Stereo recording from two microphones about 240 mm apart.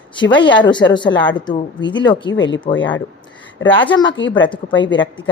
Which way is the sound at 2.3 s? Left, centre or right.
Left.